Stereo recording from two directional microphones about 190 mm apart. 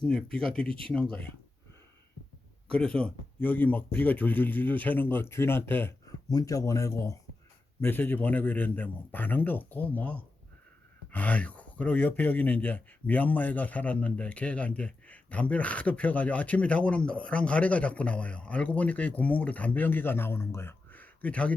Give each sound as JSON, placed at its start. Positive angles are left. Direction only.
{"t": 0.0, "sound": "speech", "side_deg": 5}
{"t": 2.6, "sound": "speech", "side_deg": 5}